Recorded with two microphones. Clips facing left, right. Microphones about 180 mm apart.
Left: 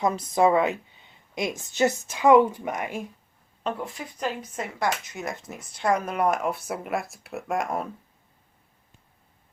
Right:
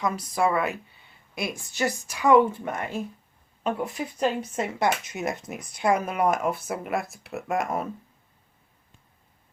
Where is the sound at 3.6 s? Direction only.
15° right (ahead or behind).